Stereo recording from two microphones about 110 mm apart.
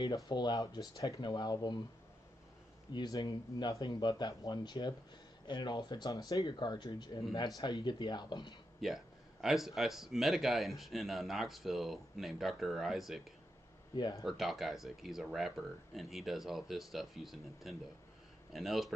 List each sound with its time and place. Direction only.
0.0 s speech: 40° left (ahead or behind)
2.9 s speech: 40° left (ahead or behind)
8.8 s speech: 5° right (ahead or behind)